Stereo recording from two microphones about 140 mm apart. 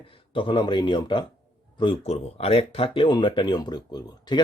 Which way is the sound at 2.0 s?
50° left (ahead or behind).